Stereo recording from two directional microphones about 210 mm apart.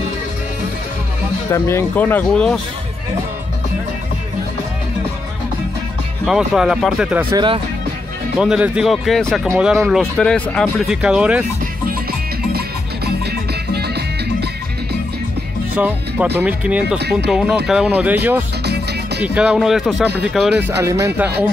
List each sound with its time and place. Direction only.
1.5 s speech: 10° left (ahead or behind)
6.2 s speech: centre (ahead or behind)
7.3 s speech: 25° right (ahead or behind)
8.4 s speech: 5° right (ahead or behind)
12.5 s music: 50° right (ahead or behind)
15.7 s speech: 10° right (ahead or behind)